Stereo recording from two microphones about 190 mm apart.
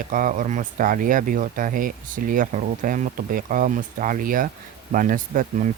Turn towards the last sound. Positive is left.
turn(degrees=-45)  # may be behind; listen again after turning